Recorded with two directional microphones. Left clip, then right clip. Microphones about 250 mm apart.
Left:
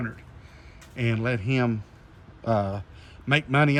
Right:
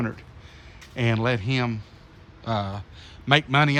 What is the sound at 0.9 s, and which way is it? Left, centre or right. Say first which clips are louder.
Speech: right 3 dB; centre.